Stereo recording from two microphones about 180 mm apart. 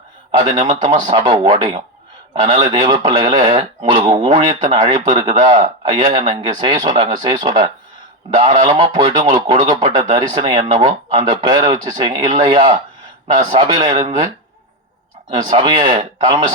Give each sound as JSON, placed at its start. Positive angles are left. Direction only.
{"t": 0.3, "sound": "a man's voice", "side_deg": -30}
{"t": 15.3, "sound": "speech", "side_deg": -30}